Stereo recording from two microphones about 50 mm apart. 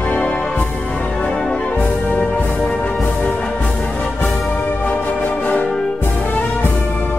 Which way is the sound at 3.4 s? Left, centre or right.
Left.